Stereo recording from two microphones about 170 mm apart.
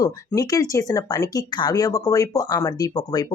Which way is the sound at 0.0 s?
20° left (ahead or behind).